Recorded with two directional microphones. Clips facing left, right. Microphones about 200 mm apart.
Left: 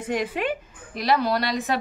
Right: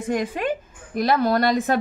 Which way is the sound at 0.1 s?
45° right (ahead or behind).